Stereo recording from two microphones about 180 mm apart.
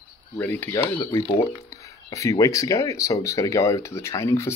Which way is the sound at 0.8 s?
20° left (ahead or behind).